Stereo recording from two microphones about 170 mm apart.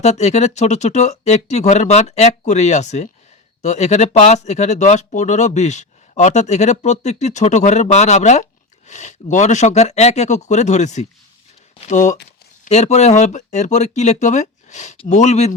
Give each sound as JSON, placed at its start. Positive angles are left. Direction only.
{"t": 0.0, "sound": "speech", "side_deg": 40}